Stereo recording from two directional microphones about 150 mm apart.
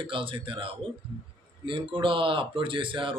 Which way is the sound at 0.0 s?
35° right (ahead or behind).